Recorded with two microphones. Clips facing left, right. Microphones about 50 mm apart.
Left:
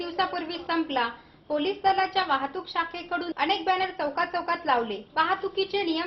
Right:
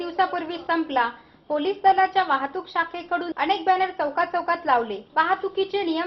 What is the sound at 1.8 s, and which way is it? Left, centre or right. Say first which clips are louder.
A man's voice: right 7 dB; centre.